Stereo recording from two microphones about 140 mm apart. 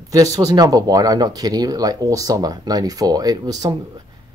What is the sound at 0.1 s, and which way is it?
Speech, 25° right (ahead or behind).